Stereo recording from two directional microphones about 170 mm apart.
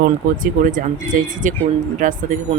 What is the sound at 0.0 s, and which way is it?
Speech, 55° right (ahead or behind).